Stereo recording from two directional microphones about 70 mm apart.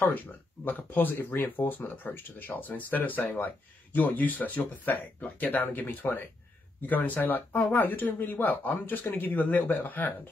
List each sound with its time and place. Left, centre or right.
0.7 s speech: left